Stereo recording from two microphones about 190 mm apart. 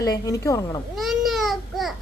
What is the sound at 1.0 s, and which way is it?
Babbling, centre (ahead or behind).